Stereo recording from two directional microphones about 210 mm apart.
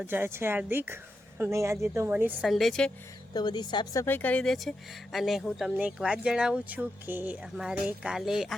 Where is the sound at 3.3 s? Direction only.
20° left (ahead or behind).